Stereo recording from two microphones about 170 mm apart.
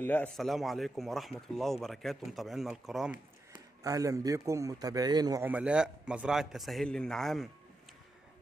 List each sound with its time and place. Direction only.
0.0 s a man's voice: 10° left (ahead or behind)
3.8 s a man's voice: 20° right (ahead or behind)
5.5 s a man's voice: 5° right (ahead or behind)